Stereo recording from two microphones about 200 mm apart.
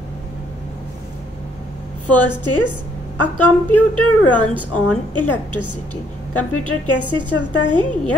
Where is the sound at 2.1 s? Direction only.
10° left (ahead or behind).